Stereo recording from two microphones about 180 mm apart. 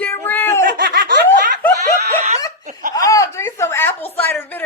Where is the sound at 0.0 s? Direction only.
10° left (ahead or behind).